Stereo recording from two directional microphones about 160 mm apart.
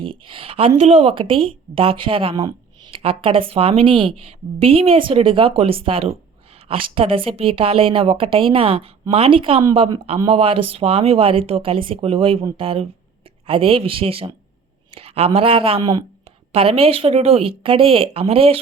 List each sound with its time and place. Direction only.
0.0 s a woman's voice: 35° right (ahead or behind)